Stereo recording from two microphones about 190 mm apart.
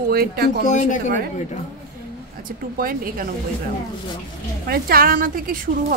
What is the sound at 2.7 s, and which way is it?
Speech, 50° right (ahead or behind).